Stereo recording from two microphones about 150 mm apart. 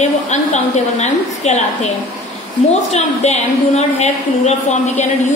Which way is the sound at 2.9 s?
45° left (ahead or behind).